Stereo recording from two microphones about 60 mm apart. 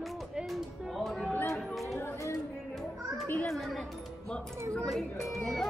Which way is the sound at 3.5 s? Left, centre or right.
Centre.